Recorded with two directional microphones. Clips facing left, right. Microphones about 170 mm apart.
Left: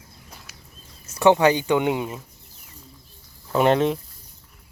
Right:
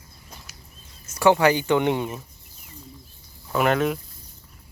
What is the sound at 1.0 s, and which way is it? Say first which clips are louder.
Speech: left 1 dB; 25° left (ahead or behind).